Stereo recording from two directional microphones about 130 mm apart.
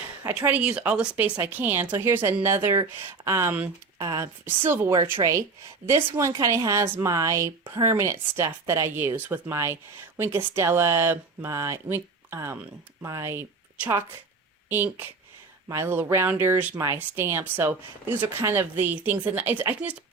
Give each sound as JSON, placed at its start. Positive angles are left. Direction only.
{"t": 0.3, "sound": "speech", "side_deg": -15}